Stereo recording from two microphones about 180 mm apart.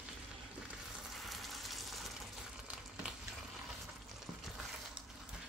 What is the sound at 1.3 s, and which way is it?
Frying, centre (ahead or behind).